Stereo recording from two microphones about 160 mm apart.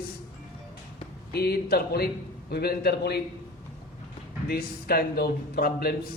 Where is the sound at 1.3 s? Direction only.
75° left (ahead or behind).